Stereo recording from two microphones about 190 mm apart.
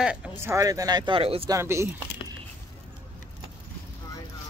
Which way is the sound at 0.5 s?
20° right (ahead or behind).